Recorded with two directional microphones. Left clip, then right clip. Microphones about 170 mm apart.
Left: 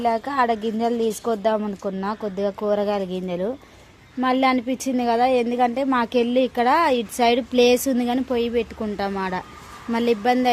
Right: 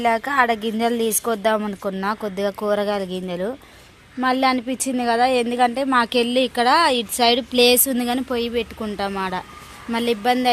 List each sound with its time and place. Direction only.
0.0 s a woman's voice: 10° left (ahead or behind)